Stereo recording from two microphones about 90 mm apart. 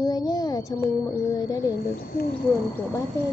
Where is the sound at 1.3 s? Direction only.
45° left (ahead or behind).